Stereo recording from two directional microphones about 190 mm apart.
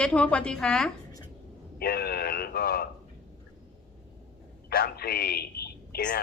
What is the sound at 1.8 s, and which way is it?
Speech, 55° left (ahead or behind).